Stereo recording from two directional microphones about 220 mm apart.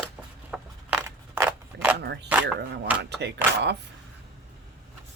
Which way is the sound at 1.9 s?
50° right (ahead or behind).